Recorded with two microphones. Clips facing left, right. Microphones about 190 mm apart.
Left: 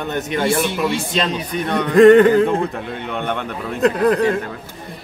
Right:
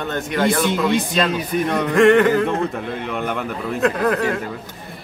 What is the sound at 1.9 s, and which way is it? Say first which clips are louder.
Music: left 5 dB; 35° left (ahead or behind).